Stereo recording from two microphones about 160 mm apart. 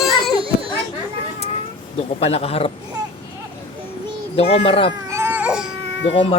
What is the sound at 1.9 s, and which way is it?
Speech, 40° left (ahead or behind).